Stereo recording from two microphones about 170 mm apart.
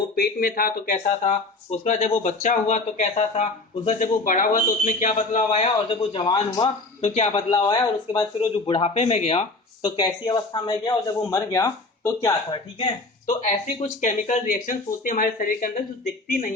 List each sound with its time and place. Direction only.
0.2 s speech: 60° left (ahead or behind); by 7.4 s 40° left (ahead or behind)
7.5 s speech: 25° left (ahead or behind)
14.0 s speech: 50° left (ahead or behind)